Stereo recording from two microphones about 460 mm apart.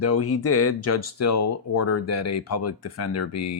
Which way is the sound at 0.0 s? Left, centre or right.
Left.